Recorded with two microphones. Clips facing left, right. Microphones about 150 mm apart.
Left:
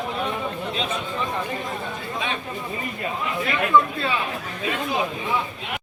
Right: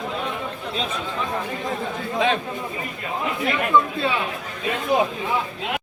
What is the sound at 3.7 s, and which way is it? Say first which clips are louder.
Speech: left 1 dB; 20° right (ahead or behind).